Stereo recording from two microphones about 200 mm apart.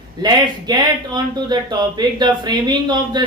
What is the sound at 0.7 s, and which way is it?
Speech, 20° right (ahead or behind).